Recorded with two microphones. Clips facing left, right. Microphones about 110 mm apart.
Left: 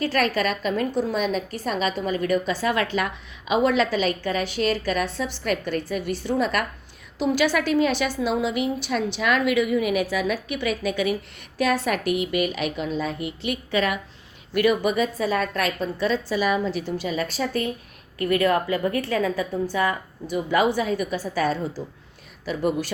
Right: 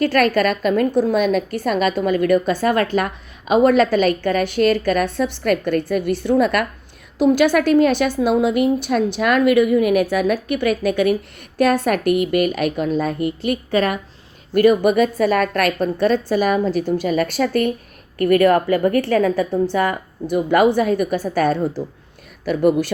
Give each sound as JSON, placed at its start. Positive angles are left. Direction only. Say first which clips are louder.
{"t": 0.0, "sound": "a woman's voice", "louder": "right 7 dB", "side_deg": -60}
{"t": 18.2, "sound": "a woman's voice", "louder": "right 7 dB", "side_deg": -55}